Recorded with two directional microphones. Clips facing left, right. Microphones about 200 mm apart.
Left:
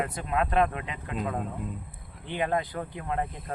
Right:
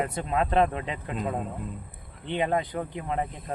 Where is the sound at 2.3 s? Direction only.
20° right (ahead or behind).